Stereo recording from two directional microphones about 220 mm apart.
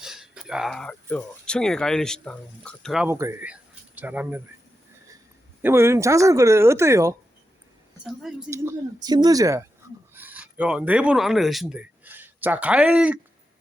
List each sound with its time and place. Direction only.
0.0 s speech: centre (ahead or behind)
5.6 s speech: 10° right (ahead or behind)
8.4 s speech: 15° right (ahead or behind)